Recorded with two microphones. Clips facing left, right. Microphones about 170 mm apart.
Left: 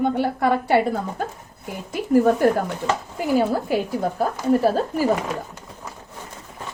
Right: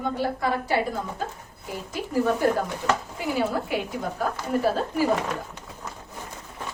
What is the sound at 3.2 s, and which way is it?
A woman's voice, 45° left (ahead or behind).